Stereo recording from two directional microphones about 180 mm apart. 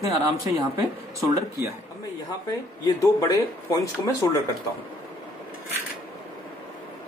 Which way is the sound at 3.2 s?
20° left (ahead or behind).